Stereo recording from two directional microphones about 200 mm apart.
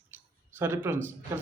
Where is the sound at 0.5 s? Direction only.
10° right (ahead or behind).